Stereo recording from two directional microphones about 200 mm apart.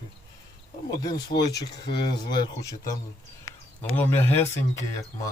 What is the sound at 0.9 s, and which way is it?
Speech, 20° left (ahead or behind).